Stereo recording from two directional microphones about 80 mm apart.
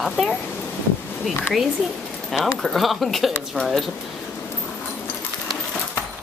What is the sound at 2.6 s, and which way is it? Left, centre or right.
Speech, centre.